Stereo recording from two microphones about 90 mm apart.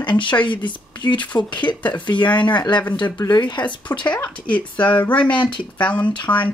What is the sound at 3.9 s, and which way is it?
Speech, 35° left (ahead or behind).